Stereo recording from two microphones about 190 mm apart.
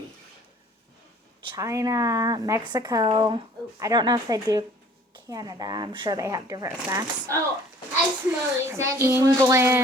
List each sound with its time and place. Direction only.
1.5 s speech: 15° right (ahead or behind)